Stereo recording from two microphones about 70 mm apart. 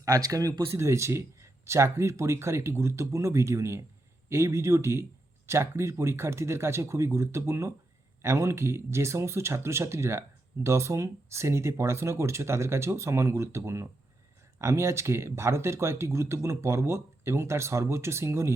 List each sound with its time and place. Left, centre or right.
0.0 s speech: right
0.6 s speech: right